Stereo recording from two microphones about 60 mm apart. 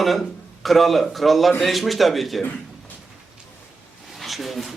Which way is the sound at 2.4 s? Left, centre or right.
Left.